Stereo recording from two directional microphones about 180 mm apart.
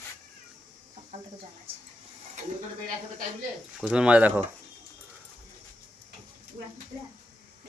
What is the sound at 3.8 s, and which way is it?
Speech, 5° right (ahead or behind).